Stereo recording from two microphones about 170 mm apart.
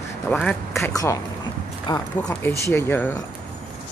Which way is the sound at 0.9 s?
20° left (ahead or behind).